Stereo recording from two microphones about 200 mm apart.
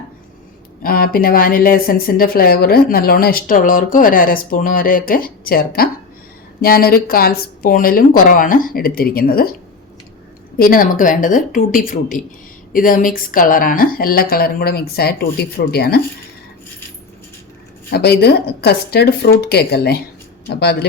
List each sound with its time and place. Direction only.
0.8 s speech: 45° left (ahead or behind)
10.6 s speech: 45° left (ahead or behind)
17.9 s speech: 55° left (ahead or behind)